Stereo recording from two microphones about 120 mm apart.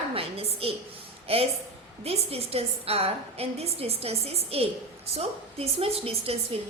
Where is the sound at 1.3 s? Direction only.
55° right (ahead or behind).